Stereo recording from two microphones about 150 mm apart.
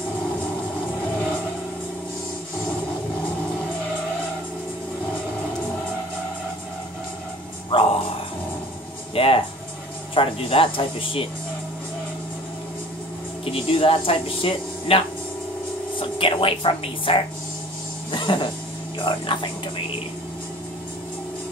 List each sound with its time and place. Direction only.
7.7 s music: 35° left (ahead or behind)
9.1 s music: 40° left (ahead or behind)
10.1 s speech: 35° left (ahead or behind)
13.5 s speech: 40° left (ahead or behind)
18.1 s a sound: 30° left (ahead or behind)
18.9 s speech: 35° left (ahead or behind)